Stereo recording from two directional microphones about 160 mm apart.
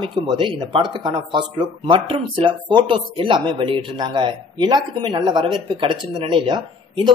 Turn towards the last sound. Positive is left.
turn(degrees=-30)  # may be behind; listen again after turning